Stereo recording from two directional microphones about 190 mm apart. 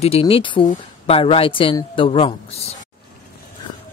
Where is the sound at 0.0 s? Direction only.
30° left (ahead or behind).